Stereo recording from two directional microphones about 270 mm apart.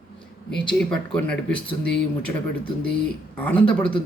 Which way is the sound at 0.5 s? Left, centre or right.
Centre.